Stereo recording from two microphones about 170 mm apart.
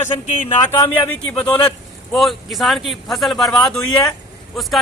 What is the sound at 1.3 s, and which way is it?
Speech, 5° left (ahead or behind).